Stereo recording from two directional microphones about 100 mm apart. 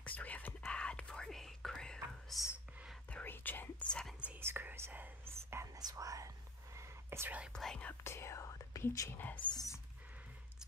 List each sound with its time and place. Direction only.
0.0 s whispering: 15° left (ahead or behind)
3.1 s whispering: 15° left (ahead or behind)
4.4 s whispering: 25° right (ahead or behind)
5.8 s whispering: 40° right (ahead or behind)
7.5 s speech: 5° left (ahead or behind)
8.0 s speech: 25° left (ahead or behind)
9.4 s speech: 45° left (ahead or behind)